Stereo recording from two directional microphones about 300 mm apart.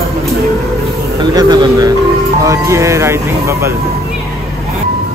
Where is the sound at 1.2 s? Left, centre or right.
Centre.